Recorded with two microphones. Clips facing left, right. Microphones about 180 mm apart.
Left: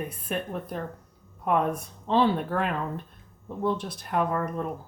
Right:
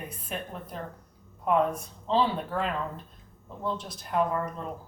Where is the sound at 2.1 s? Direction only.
60° left (ahead or behind).